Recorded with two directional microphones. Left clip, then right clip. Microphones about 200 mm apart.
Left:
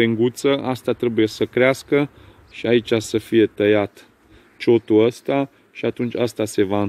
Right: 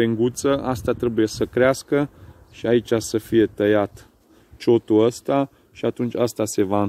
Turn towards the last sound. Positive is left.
turn(degrees=-5)  # may be behind; listen again after turning